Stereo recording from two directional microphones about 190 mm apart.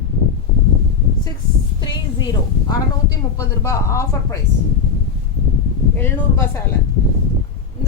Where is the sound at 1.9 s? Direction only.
20° left (ahead or behind).